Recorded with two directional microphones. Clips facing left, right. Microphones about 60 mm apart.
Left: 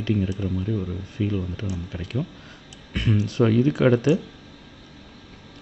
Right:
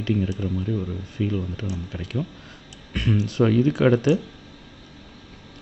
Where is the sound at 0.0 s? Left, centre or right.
Left.